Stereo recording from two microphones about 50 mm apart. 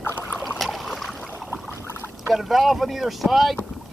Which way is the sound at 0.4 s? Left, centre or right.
Centre.